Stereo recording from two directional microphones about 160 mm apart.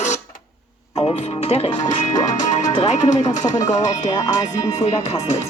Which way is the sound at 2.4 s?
50° left (ahead or behind).